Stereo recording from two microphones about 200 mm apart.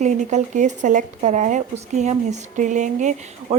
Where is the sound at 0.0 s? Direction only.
35° right (ahead or behind).